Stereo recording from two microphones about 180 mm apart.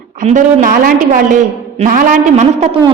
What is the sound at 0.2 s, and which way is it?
A woman's voice, 45° right (ahead or behind).